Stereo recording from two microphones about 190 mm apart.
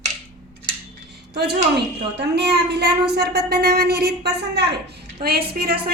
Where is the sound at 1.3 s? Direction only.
60° right (ahead or behind).